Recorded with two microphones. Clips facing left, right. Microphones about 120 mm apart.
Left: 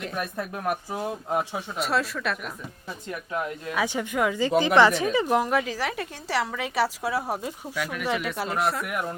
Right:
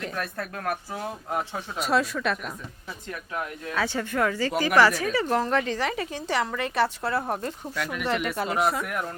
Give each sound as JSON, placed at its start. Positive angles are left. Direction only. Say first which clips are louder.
{"t": 0.1, "sound": "speech", "louder": "left 1 dB", "side_deg": 15}
{"t": 1.5, "sound": "speech", "louder": "right 1 dB", "side_deg": 0}
{"t": 3.1, "sound": "speech", "louder": "left 3 dB", "side_deg": 15}